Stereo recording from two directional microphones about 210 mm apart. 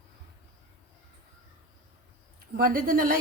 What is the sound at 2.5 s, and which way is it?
Speech, 45° right (ahead or behind).